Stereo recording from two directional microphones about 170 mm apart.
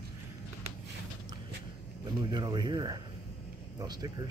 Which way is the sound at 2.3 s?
25° right (ahead or behind).